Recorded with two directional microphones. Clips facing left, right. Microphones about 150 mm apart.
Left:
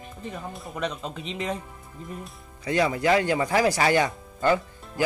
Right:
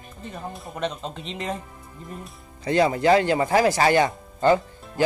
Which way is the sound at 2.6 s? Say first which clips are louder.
Right 4 dB; 35° right (ahead or behind).